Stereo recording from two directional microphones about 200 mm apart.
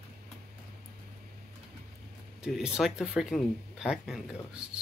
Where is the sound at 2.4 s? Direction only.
5° right (ahead or behind).